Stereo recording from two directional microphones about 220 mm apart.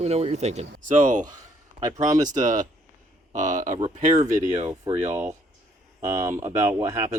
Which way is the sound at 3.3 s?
35° right (ahead or behind).